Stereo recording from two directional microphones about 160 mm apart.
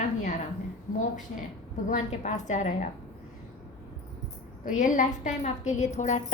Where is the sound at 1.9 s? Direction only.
45° left (ahead or behind).